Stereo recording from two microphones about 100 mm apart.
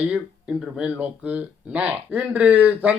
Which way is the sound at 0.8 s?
10° right (ahead or behind).